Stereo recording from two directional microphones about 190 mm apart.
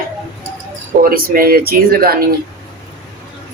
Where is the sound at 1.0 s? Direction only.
50° right (ahead or behind).